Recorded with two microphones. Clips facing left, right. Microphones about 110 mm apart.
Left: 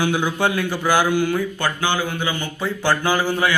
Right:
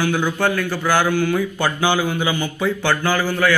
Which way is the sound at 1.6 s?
15° right (ahead or behind).